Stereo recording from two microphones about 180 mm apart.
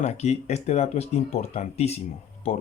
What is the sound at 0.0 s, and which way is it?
Speech, 40° left (ahead or behind).